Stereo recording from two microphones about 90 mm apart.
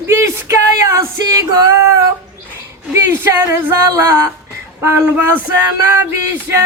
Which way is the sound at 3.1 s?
25° right (ahead or behind).